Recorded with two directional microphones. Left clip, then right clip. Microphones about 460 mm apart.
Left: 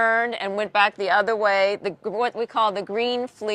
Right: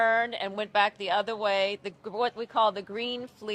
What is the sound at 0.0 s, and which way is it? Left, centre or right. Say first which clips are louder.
Speech: left 4 dB; left.